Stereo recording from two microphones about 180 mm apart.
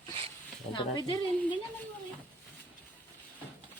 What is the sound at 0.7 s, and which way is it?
Speech, 25° left (ahead or behind).